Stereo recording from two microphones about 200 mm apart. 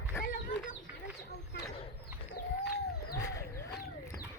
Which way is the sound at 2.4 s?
45° left (ahead or behind).